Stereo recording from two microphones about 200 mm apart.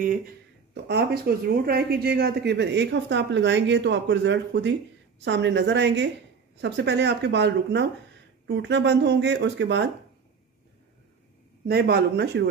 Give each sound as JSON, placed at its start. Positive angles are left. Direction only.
{"t": 0.8, "sound": "speech", "side_deg": -55}
{"t": 11.6, "sound": "speech", "side_deg": -50}